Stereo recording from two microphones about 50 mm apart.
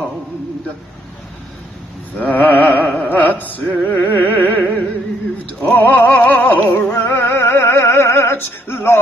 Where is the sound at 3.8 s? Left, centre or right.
Left.